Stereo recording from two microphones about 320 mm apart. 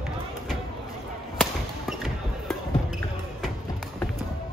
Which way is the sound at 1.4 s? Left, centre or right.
Centre.